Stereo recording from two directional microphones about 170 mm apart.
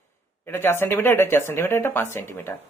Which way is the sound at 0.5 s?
15° left (ahead or behind).